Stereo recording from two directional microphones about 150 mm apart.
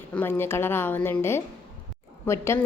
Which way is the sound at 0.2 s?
15° left (ahead or behind).